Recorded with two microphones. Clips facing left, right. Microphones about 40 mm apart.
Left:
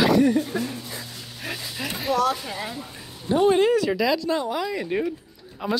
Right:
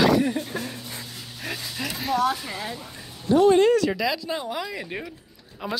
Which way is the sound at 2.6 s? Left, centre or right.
Centre.